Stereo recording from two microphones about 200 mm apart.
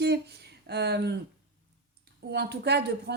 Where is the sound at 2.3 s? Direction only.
55° right (ahead or behind).